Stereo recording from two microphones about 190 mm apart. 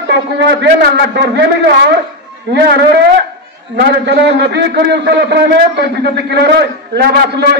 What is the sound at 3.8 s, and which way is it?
A man's voice, 60° right (ahead or behind).